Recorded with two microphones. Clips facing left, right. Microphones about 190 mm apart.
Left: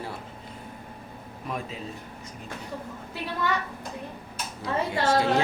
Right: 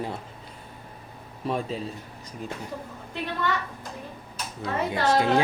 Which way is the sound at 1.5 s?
30° right (ahead or behind).